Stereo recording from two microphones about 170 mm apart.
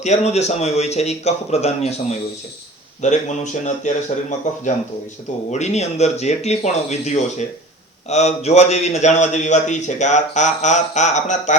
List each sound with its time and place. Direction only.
0.0 s a man's voice: 40° left (ahead or behind)